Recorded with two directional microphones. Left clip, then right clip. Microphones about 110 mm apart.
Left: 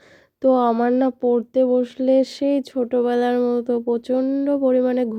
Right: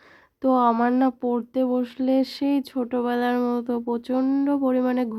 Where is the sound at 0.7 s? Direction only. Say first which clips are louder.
Left 3 dB; 20° left (ahead or behind).